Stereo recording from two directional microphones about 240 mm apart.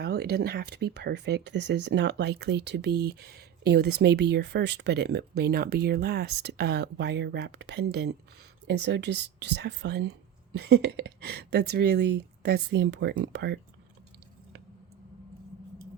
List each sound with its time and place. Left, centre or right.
0.0 s speech: right